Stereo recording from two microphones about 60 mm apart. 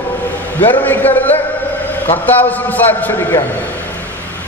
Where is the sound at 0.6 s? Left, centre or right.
Left.